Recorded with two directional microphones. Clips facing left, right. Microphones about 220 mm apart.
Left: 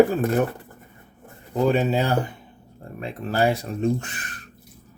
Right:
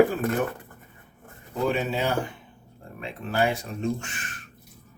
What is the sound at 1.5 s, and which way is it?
Speech, 35° left (ahead or behind).